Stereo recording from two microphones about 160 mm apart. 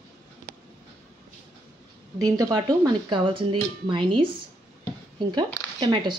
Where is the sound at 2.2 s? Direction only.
20° right (ahead or behind).